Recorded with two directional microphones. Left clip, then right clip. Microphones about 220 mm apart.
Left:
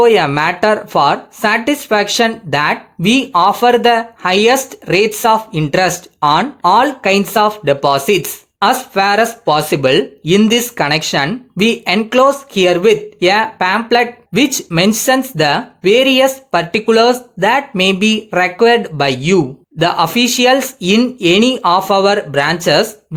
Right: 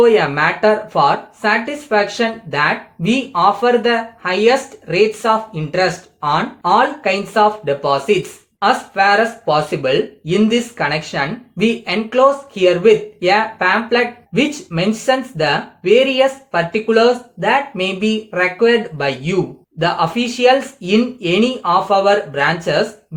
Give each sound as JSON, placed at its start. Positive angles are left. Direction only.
{"t": 0.0, "sound": "speech", "side_deg": 50}